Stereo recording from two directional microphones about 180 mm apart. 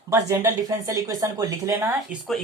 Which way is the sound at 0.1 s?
15° right (ahead or behind).